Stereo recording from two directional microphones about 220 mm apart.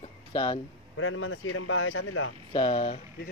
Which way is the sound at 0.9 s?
65° left (ahead or behind).